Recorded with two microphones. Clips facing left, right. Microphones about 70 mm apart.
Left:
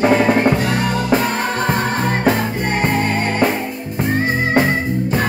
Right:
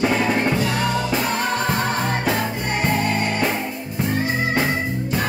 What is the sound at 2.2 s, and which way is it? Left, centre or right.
Music, left.